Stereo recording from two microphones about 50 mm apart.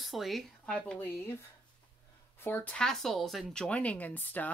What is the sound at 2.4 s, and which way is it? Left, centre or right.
Speech, left.